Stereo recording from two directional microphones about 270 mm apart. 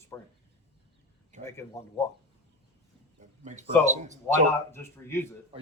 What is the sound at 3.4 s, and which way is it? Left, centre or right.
Speech, right.